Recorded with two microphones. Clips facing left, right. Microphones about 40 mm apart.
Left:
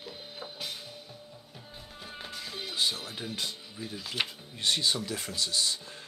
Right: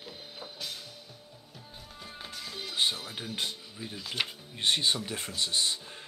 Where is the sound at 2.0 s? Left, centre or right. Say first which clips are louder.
Left 1 dB; centre.